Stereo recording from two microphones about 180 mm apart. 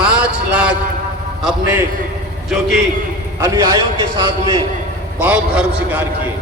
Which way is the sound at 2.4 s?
5° right (ahead or behind).